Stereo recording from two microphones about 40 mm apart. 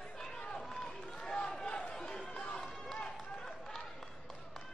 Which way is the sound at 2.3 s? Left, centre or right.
Left.